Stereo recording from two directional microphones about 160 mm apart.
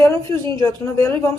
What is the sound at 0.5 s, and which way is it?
Speech, 20° left (ahead or behind).